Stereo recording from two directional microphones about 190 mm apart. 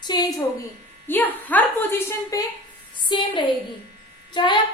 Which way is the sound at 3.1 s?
25° left (ahead or behind).